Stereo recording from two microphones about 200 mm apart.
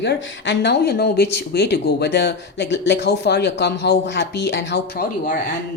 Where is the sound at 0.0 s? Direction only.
60° left (ahead or behind).